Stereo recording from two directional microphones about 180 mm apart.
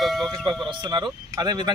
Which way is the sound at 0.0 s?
Centre (ahead or behind).